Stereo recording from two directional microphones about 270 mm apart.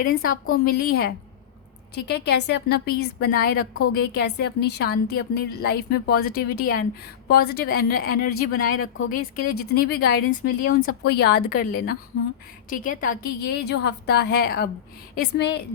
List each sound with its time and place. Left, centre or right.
0.0 s speech: left
8.7 s a woman's voice: left
9.1 s speech: left